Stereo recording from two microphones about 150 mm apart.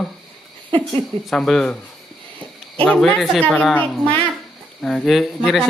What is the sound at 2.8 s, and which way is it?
A woman's voice, 10° left (ahead or behind).